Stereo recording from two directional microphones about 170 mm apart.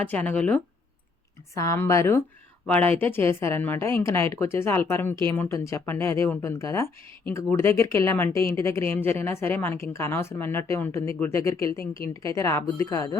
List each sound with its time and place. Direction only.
0.0 s a woman's voice: 10° left (ahead or behind)